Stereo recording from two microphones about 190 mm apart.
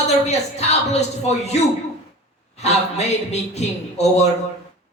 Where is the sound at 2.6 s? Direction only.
35° left (ahead or behind).